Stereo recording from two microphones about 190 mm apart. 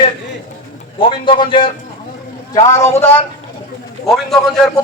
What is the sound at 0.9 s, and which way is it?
A man's voice, 25° left (ahead or behind).